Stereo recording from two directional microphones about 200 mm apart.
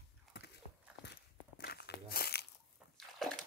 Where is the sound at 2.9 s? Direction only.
Centre (ahead or behind).